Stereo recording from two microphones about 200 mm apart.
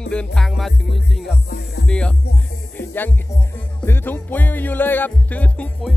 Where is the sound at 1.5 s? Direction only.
55° left (ahead or behind).